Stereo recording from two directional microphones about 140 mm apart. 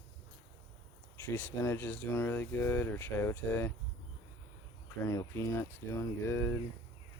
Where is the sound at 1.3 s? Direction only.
20° left (ahead or behind).